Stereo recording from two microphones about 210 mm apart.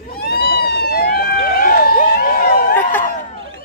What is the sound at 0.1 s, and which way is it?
Vehicle, 45° left (ahead or behind).